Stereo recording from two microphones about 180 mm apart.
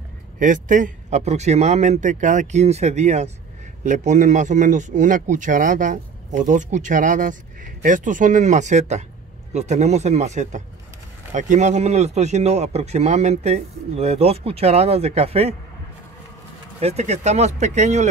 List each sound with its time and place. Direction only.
0.4 s a man's voice: 45° right (ahead or behind)
16.8 s a man's voice: 40° right (ahead or behind)